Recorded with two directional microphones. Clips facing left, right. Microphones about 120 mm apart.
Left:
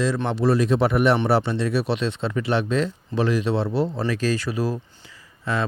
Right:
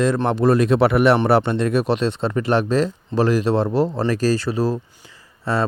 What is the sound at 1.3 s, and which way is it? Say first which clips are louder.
Speech: right 4 dB; 55° right (ahead or behind).